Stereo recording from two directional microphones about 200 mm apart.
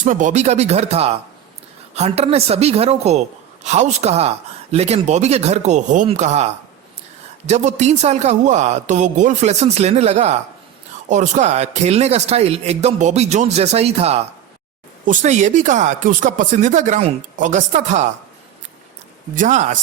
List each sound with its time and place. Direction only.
0.0 s speech: 40° right (ahead or behind)
19.4 s speech: 40° right (ahead or behind)